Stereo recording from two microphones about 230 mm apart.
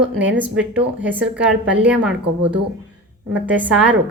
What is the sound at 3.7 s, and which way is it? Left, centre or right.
Speech, centre.